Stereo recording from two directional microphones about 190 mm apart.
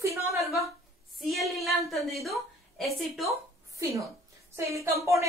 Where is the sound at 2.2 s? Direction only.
Centre (ahead or behind).